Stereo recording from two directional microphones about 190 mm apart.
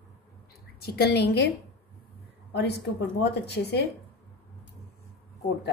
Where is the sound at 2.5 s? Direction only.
60° left (ahead or behind).